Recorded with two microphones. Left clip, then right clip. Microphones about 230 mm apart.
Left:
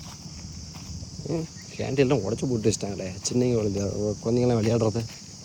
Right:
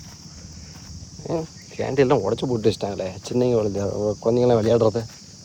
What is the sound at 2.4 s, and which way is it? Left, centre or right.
Speech, right.